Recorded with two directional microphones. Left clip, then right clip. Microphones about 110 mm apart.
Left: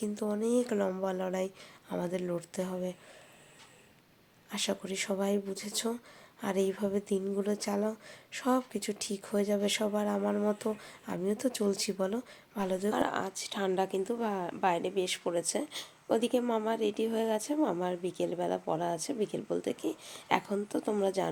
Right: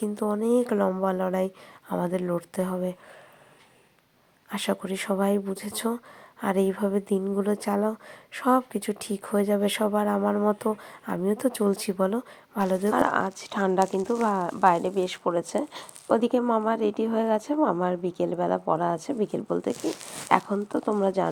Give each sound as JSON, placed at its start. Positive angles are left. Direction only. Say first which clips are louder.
{"t": 0.0, "sound": "a woman's voice", "louder": "right 6 dB", "side_deg": -35}
{"t": 4.4, "sound": "a woman's voice", "louder": "right 6 dB", "side_deg": -40}